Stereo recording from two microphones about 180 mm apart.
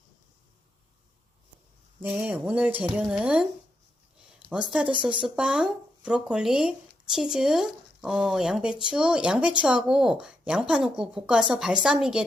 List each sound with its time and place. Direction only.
2.0 s speech: 10° right (ahead or behind)
4.5 s speech: 5° right (ahead or behind)